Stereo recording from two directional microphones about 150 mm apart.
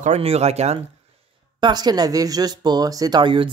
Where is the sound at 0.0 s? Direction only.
45° right (ahead or behind).